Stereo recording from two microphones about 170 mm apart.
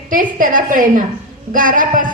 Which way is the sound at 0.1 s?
55° right (ahead or behind).